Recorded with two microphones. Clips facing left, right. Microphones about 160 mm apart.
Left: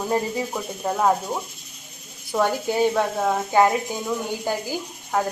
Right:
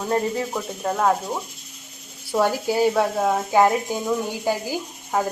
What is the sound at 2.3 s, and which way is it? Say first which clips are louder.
Speech: right 1 dB; 5° right (ahead or behind).